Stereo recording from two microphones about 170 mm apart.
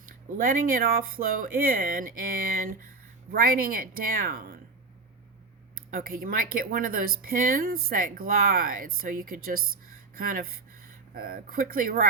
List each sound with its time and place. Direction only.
0.4 s speech: 55° right (ahead or behind)
5.7 s speech: 60° right (ahead or behind)